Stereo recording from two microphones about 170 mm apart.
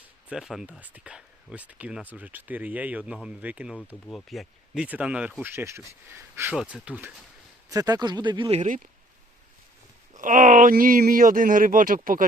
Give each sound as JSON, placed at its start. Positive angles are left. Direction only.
{"t": 0.3, "sound": "speech", "side_deg": -5}
{"t": 6.6, "sound": "speech", "side_deg": -5}
{"t": 7.7, "sound": "speech", "side_deg": -20}
{"t": 10.2, "sound": "speech", "side_deg": -50}